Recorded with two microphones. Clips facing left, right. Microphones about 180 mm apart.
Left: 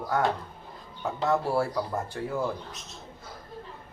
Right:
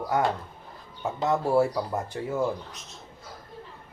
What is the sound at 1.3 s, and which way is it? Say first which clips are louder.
Speech: right 3 dB; 20° right (ahead or behind).